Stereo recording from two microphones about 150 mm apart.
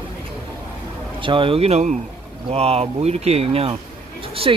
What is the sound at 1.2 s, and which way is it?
Speech, 35° right (ahead or behind).